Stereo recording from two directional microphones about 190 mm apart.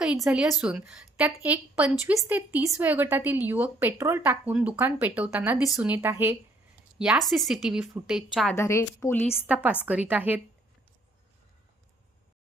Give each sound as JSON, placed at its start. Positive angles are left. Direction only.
{"t": 0.0, "sound": "a woman's voice", "side_deg": -5}
{"t": 8.5, "sound": "a woman's voice", "side_deg": 15}
{"t": 9.5, "sound": "a woman's voice", "side_deg": -10}